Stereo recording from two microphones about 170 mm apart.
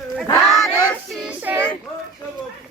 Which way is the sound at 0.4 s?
Centre (ahead or behind).